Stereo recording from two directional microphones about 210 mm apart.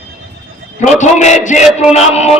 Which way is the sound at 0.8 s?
35° left (ahead or behind).